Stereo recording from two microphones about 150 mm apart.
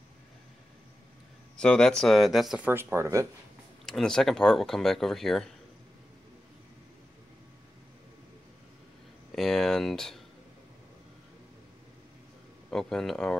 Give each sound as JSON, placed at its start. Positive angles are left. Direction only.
{"t": 1.6, "sound": "speech", "side_deg": 5}
{"t": 2.7, "sound": "speech", "side_deg": -15}
{"t": 3.8, "sound": "speech", "side_deg": 5}
{"t": 9.3, "sound": "a sound", "side_deg": 0}
{"t": 12.7, "sound": "speech", "side_deg": 5}